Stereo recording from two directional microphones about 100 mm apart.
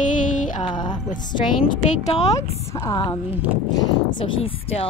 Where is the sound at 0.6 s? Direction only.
50° left (ahead or behind).